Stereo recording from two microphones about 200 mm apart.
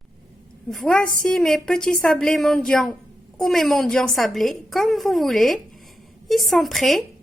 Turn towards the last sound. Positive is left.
turn(degrees=0)  # may be behind; listen again after turning